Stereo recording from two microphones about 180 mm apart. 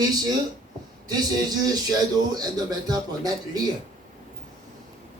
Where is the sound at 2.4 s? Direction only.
20° right (ahead or behind).